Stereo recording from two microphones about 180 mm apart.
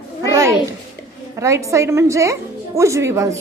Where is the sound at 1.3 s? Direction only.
15° right (ahead or behind).